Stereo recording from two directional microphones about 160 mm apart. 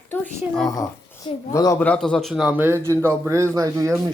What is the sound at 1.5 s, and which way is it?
Speech, 20° left (ahead or behind).